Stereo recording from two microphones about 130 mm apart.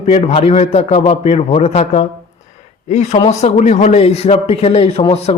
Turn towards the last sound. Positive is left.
turn(degrees=50)  # may be behind; listen again after turning